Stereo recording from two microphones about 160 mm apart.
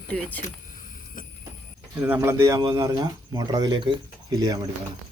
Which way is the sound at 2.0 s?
15° right (ahead or behind).